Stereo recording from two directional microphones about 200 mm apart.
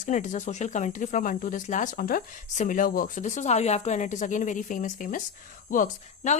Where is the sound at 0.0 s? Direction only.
40° left (ahead or behind).